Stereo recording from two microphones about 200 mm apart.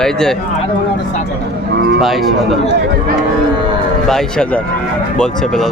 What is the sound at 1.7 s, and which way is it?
Cattle, 55° right (ahead or behind).